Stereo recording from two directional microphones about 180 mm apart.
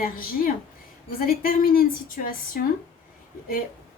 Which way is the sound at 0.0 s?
50° left (ahead or behind).